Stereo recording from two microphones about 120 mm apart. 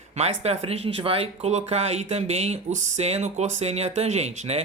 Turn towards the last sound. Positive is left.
turn(degrees=-65)  # may be behind; listen again after turning